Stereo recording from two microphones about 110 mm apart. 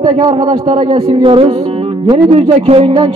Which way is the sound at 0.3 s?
55° right (ahead or behind).